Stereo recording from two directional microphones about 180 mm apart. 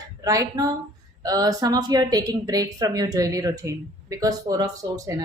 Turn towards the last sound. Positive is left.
turn(degrees=-20)  # may be behind; listen again after turning